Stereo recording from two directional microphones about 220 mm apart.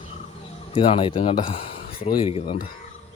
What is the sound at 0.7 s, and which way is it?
Speech, 25° left (ahead or behind).